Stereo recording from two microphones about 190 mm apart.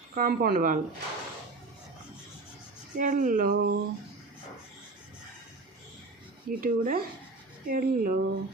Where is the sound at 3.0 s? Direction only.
45° right (ahead or behind).